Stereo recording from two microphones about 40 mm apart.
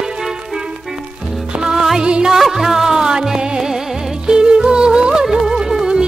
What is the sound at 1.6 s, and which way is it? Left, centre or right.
Music, centre.